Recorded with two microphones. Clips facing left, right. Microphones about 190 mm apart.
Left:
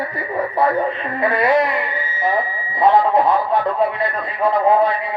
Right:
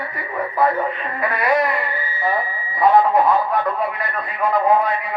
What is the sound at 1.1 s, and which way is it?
Music, 25° left (ahead or behind).